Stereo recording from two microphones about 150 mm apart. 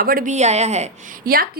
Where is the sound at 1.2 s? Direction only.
75° right (ahead or behind).